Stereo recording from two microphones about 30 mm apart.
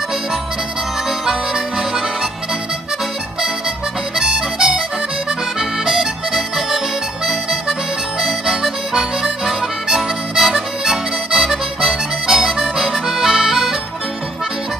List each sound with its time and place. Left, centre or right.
1.2 s harmonica: centre
4.3 s accordion: centre
5.6 s accordion: centre
8.5 s harmonica: centre